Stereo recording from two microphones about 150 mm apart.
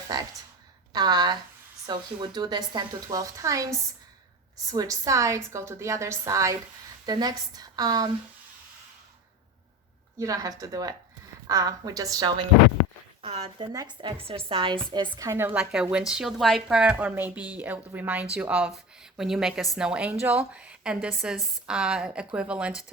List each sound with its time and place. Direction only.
0.1 s a woman's voice: 25° right (ahead or behind)
10.2 s a woman's voice: 20° right (ahead or behind)
13.4 s speech: 30° right (ahead or behind)
15.3 s a woman's voice: 15° right (ahead or behind)